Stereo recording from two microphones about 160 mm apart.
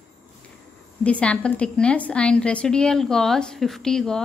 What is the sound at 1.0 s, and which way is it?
A woman's voice, 10° left (ahead or behind).